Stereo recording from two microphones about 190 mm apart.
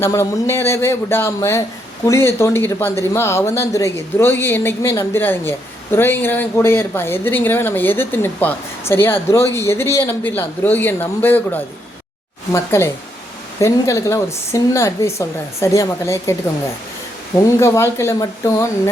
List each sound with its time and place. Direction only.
0.0 s speech: 15° left (ahead or behind)
17.4 s speech: 15° left (ahead or behind)